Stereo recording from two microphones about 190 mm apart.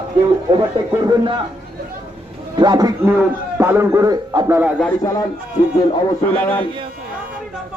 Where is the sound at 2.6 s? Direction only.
20° right (ahead or behind).